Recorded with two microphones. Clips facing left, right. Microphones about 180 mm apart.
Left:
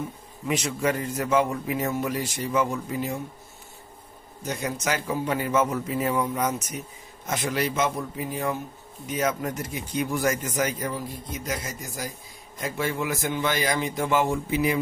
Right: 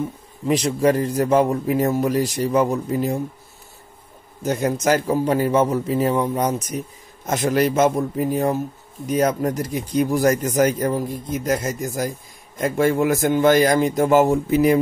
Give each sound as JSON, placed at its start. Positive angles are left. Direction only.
{"t": 0.5, "sound": "speech", "side_deg": -35}
{"t": 4.5, "sound": "a man's voice", "side_deg": -50}